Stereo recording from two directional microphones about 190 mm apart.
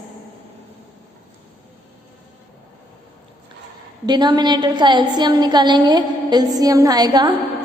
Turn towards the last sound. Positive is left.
turn(degrees=-20)  # may be behind; listen again after turning